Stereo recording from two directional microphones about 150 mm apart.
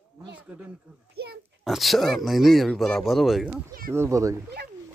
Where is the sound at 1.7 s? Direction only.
Centre (ahead or behind); by 4.4 s 20° right (ahead or behind).